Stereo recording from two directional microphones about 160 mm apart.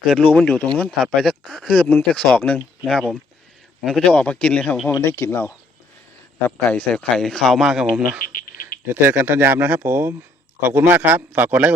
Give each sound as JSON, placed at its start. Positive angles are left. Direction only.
{"t": 0.0, "sound": "speech", "side_deg": 5}
{"t": 4.9, "sound": "speech", "side_deg": 20}
{"t": 6.7, "sound": "speech", "side_deg": 10}
{"t": 8.3, "sound": "a sound", "side_deg": 60}
{"t": 8.9, "sound": "speech", "side_deg": -10}